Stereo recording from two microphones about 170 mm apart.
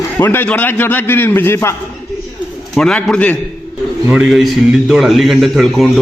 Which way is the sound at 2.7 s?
5° left (ahead or behind).